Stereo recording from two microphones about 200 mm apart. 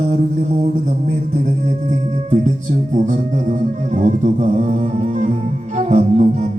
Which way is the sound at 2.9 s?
40° right (ahead or behind).